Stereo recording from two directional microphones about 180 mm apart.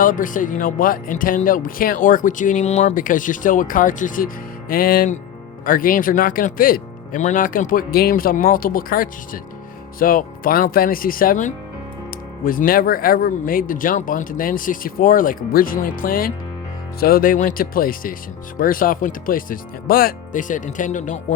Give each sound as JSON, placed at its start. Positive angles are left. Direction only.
{"t": 0.0, "sound": "speech", "side_deg": 45}